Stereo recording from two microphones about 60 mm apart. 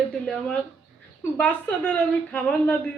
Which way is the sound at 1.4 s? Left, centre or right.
Left.